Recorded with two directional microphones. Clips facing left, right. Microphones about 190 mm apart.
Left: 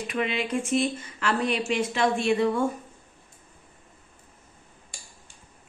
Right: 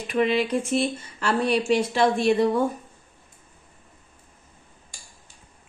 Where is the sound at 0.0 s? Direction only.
35° right (ahead or behind).